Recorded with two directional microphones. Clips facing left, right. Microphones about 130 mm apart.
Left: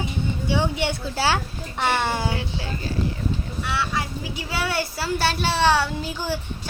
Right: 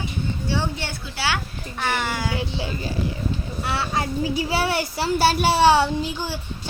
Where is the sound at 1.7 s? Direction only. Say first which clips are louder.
Left 2 dB; 25° left (ahead or behind).